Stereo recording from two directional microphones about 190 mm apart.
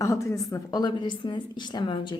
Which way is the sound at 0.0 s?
15° left (ahead or behind).